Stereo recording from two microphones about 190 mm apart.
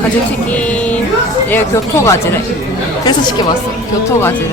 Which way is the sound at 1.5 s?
15° left (ahead or behind).